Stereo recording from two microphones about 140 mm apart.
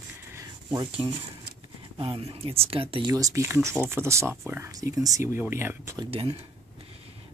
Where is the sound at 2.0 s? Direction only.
40° right (ahead or behind).